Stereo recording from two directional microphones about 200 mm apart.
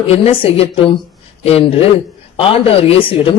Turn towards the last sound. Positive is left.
turn(degrees=25)  # may be behind; listen again after turning